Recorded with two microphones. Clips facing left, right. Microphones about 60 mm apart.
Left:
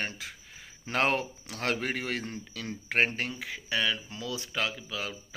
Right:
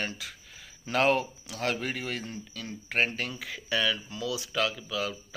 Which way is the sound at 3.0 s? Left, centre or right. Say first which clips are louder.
Left 1 dB; left.